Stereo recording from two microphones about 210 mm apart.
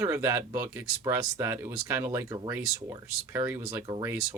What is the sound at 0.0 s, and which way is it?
Speech, 15° right (ahead or behind).